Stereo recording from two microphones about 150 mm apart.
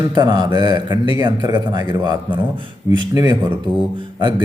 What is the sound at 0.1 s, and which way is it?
A man's voice, 30° right (ahead or behind).